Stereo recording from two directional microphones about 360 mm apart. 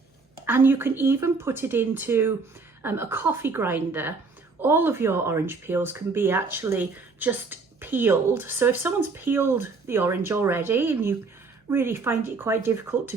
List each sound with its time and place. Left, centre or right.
0.4 s speech: centre